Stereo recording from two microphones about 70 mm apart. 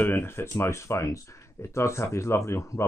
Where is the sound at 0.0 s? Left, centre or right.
Left.